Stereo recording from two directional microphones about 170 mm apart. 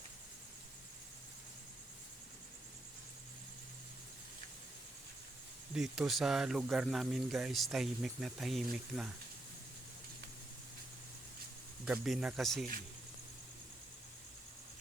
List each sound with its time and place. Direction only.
5.7 s speech: centre (ahead or behind)
11.9 s speech: centre (ahead or behind)